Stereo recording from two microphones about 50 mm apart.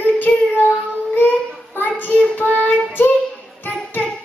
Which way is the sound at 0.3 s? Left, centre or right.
Centre.